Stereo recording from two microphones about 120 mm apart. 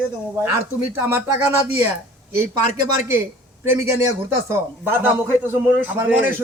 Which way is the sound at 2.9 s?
20° right (ahead or behind).